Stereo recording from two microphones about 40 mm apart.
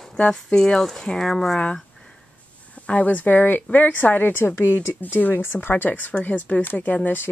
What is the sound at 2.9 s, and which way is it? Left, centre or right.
A woman's voice, left.